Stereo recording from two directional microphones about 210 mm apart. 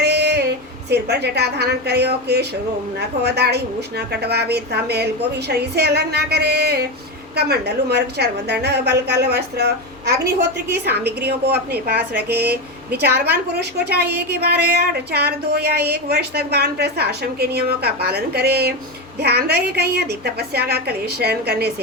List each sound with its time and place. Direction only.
0.0 s a woman's voice: 50° right (ahead or behind)